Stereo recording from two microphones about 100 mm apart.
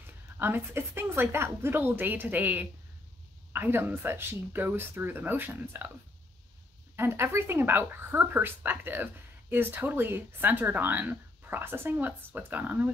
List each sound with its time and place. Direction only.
0.0 s speech: 20° right (ahead or behind)
7.0 s speech: 25° right (ahead or behind)